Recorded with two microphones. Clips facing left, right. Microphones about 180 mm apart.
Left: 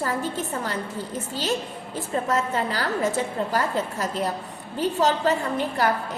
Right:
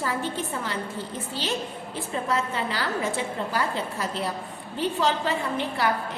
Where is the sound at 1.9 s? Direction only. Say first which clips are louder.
Left 3 dB; 45° left (ahead or behind).